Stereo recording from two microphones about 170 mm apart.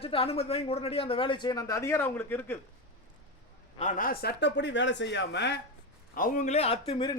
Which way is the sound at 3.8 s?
50° left (ahead or behind).